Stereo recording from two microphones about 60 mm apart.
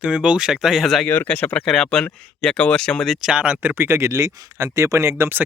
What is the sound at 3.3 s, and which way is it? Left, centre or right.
Speech, right.